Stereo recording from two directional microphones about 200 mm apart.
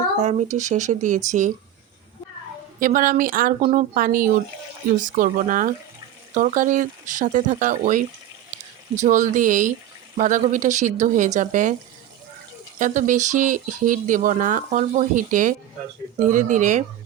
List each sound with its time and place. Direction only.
0.2 s speech: 35° right (ahead or behind)
2.8 s speech: 45° right (ahead or behind)
12.8 s speech: 40° right (ahead or behind)